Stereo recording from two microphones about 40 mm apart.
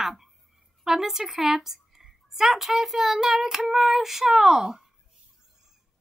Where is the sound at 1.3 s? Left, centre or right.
Centre.